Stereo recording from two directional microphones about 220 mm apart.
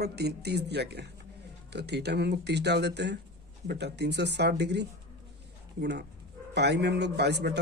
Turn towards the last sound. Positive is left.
turn(degrees=-50)  # may be behind; listen again after turning